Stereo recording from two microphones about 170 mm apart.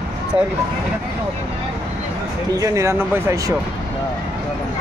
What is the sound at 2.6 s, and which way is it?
Speech, 15° right (ahead or behind).